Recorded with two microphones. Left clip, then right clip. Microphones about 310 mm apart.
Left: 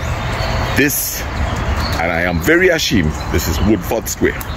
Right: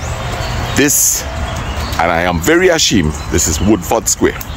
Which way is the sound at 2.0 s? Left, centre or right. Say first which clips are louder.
Right 3 dB; centre.